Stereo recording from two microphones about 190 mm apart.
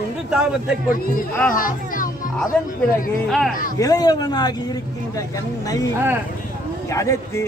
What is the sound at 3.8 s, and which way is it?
Speech, 20° left (ahead or behind).